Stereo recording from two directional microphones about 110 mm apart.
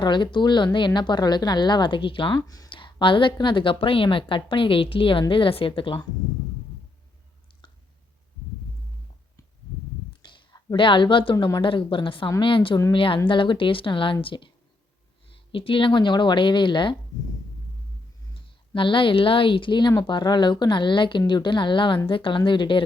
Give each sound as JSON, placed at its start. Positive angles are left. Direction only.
{"t": 0.0, "sound": "a woman's voice", "side_deg": 45}
{"t": 10.2, "sound": "a woman's voice", "side_deg": 40}
{"t": 15.5, "sound": "a woman's voice", "side_deg": 50}
{"t": 18.7, "sound": "a woman's voice", "side_deg": 50}